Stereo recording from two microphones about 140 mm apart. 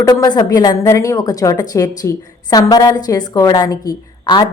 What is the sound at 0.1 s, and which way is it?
A woman's voice, 25° left (ahead or behind).